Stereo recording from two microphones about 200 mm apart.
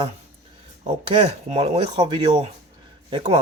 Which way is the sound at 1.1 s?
30° right (ahead or behind).